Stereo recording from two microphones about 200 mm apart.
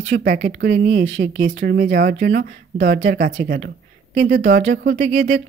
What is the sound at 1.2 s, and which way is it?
Speech, 65° right (ahead or behind).